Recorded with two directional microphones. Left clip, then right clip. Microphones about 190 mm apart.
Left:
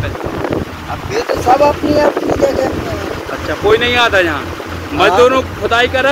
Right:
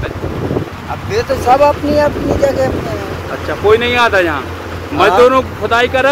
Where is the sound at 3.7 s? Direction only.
40° right (ahead or behind).